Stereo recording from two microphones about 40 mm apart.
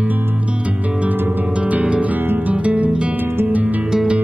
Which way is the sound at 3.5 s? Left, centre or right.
Right.